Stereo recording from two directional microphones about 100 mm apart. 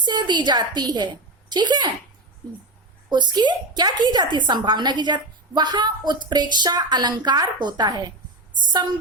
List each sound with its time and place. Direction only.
0.0 s a woman's voice: 50° right (ahead or behind)
3.1 s a woman's voice: 50° right (ahead or behind)